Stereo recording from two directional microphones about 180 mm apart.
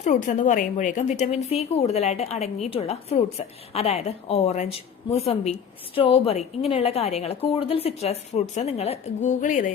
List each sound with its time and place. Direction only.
0.0 s speech: 45° left (ahead or behind)